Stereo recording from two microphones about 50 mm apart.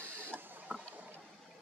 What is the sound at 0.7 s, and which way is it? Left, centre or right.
Boat, right.